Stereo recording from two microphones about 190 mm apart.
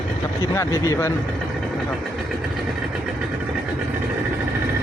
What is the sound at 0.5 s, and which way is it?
Speech, 15° left (ahead or behind).